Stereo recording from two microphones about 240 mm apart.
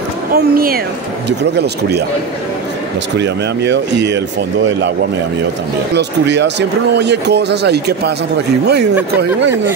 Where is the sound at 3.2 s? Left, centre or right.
Right.